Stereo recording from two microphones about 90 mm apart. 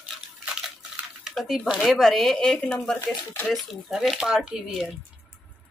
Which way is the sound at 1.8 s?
5° left (ahead or behind).